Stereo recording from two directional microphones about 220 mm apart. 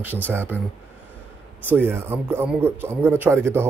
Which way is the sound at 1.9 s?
10° right (ahead or behind).